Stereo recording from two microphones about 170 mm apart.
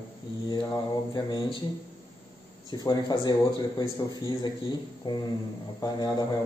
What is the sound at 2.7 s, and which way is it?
Speech, 25° left (ahead or behind).